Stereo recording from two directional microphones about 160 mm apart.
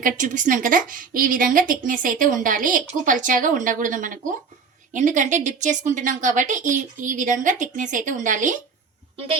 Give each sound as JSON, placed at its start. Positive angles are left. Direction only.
{"t": 0.0, "sound": "a woman's voice", "side_deg": -55}